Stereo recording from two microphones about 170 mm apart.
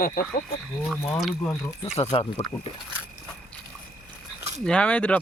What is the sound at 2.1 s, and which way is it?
Speech, 35° left (ahead or behind).